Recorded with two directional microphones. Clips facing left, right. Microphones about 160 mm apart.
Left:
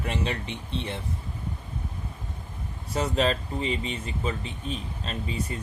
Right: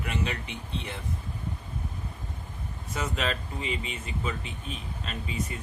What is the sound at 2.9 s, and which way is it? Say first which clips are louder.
Speech: left 6 dB; 35° left (ahead or behind).